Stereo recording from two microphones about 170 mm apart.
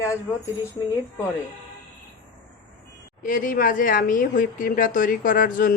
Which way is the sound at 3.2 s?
55° left (ahead or behind).